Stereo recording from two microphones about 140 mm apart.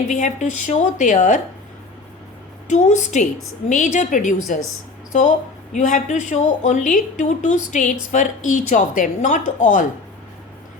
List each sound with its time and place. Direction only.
0.1 s a woman's voice: 60° left (ahead or behind)
2.6 s a woman's voice: 60° left (ahead or behind)